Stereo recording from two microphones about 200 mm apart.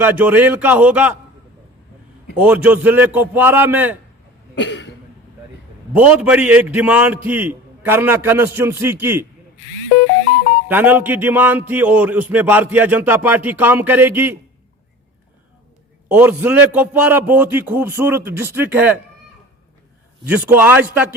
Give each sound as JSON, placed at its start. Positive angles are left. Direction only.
{"t": 0.0, "sound": "a man's voice", "side_deg": -10}
{"t": 2.3, "sound": "a man's voice", "side_deg": -5}
{"t": 4.5, "sound": "cough", "side_deg": 65}
{"t": 5.9, "sound": "a man's voice", "side_deg": -5}
{"t": 10.7, "sound": "a man's voice", "side_deg": -10}
{"t": 16.0, "sound": "a man's voice", "side_deg": -10}
{"t": 20.2, "sound": "a man's voice", "side_deg": -10}